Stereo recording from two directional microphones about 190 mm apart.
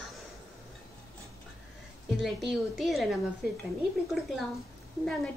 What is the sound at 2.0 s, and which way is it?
A woman's voice, centre (ahead or behind).